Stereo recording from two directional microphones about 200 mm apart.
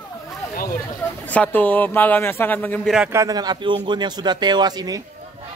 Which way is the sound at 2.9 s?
10° right (ahead or behind).